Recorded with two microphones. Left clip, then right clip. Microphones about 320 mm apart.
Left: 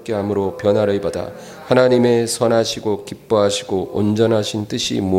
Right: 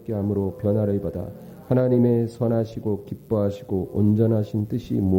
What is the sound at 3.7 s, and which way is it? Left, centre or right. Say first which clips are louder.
Speech: left 5 dB; left.